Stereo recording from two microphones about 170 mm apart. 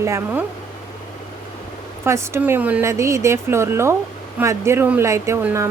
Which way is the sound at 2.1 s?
15° right (ahead or behind).